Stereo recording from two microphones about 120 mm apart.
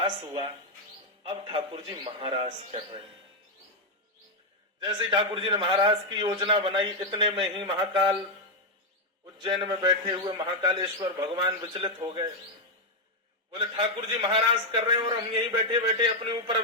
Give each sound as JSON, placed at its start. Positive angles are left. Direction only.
{"t": 1.3, "sound": "a man's voice", "side_deg": -50}
{"t": 4.8, "sound": "a man's voice", "side_deg": -40}
{"t": 9.4, "sound": "a man's voice", "side_deg": -40}
{"t": 13.5, "sound": "a man's voice", "side_deg": -45}